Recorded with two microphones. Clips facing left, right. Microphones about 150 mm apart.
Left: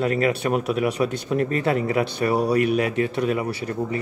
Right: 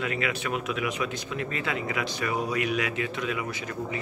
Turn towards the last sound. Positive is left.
turn(degrees=40)  # may be behind; listen again after turning